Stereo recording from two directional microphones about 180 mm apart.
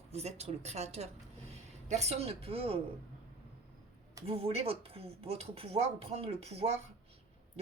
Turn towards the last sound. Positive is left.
turn(degrees=-35)  # may be behind; listen again after turning